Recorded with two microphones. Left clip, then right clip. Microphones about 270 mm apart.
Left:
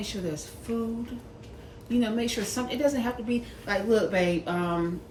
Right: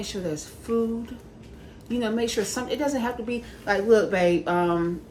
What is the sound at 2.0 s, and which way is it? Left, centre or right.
A woman's voice, centre.